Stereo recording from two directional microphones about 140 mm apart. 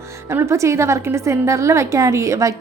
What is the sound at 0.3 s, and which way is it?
A woman's voice, 20° right (ahead or behind).